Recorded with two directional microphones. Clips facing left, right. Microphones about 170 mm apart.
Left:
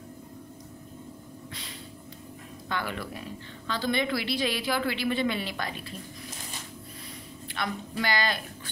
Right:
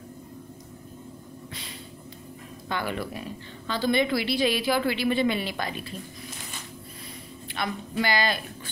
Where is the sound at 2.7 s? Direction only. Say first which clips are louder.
Right 3 dB; 20° right (ahead or behind).